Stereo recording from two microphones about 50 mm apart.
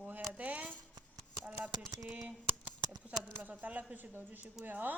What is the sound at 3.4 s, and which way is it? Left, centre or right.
Speech, right.